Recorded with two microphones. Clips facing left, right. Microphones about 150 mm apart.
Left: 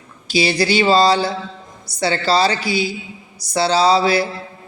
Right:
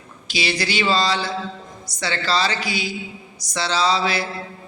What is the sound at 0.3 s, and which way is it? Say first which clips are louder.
A man's voice: left 7 dB; 35° left (ahead or behind).